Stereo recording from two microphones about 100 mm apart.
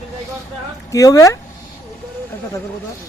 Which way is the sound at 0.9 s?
35° left (ahead or behind).